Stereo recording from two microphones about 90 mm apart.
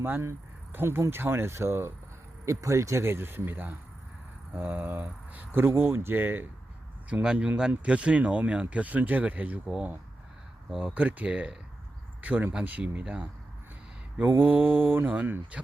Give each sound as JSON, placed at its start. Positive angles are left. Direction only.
{"t": 0.0, "sound": "speech", "side_deg": -25}